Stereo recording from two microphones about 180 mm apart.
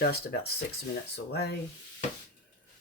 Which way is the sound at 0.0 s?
60° left (ahead or behind).